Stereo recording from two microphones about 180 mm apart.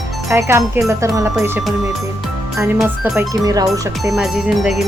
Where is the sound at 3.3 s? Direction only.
20° right (ahead or behind).